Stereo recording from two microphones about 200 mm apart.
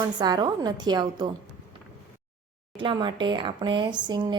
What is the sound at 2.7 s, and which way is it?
Speech, 25° right (ahead or behind).